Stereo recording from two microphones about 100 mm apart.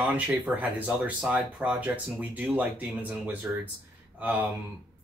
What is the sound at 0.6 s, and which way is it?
Speech, 15° right (ahead or behind).